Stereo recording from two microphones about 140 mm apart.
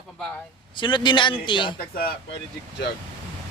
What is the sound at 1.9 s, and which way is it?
Speech, 90° left.